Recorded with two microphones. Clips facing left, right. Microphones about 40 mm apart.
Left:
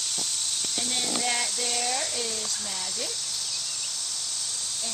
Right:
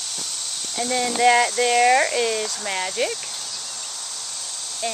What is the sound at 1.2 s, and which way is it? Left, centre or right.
Speech, right.